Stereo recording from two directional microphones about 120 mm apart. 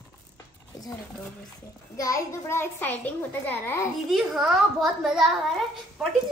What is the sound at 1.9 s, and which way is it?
A child's voice, 30° left (ahead or behind).